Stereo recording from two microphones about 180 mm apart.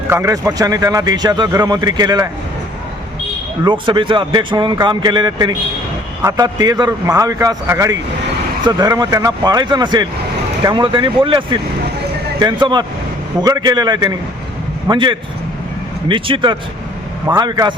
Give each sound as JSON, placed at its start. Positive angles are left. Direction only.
{"t": 0.1, "sound": "a man's voice", "side_deg": -15}
{"t": 3.6, "sound": "a man's voice", "side_deg": -25}